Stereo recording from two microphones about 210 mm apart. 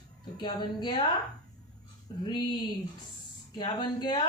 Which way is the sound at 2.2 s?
20° left (ahead or behind).